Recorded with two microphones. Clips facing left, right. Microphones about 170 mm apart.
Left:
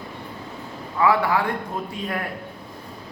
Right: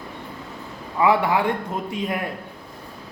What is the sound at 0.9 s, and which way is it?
Speech, 20° right (ahead or behind).